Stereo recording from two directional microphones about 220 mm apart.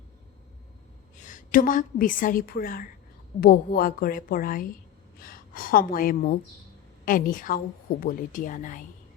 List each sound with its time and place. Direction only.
1.1 s a woman's voice: 35° left (ahead or behind)